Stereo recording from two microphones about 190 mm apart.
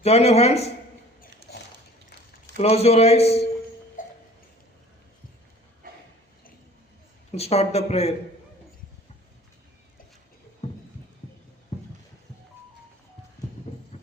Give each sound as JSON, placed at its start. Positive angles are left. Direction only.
{"t": 0.0, "sound": "a man's voice", "side_deg": 35}
{"t": 1.5, "sound": "a sound", "side_deg": 60}
{"t": 2.6, "sound": "a man's voice", "side_deg": 35}
{"t": 4.0, "sound": "music", "side_deg": 45}
{"t": 7.3, "sound": "a man's voice", "side_deg": 35}
{"t": 10.6, "sound": "heart murmur", "side_deg": 35}
{"t": 11.7, "sound": "a sound", "side_deg": 35}
{"t": 13.7, "sound": "clip-clop", "side_deg": 35}